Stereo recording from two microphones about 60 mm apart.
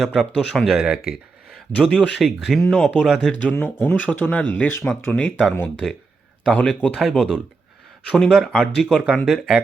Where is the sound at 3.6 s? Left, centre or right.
Left.